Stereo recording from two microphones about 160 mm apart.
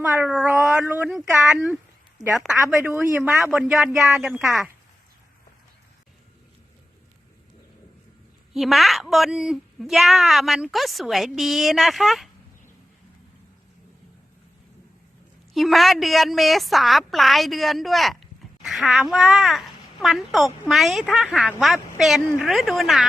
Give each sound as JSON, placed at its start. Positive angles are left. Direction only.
{"t": 0.2, "sound": "speech", "side_deg": -5}
{"t": 3.5, "sound": "speech", "side_deg": 0}
{"t": 8.5, "sound": "speech", "side_deg": 0}
{"t": 15.5, "sound": "speech", "side_deg": 0}